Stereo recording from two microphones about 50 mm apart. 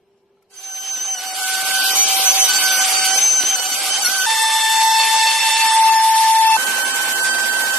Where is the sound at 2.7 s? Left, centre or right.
Centre.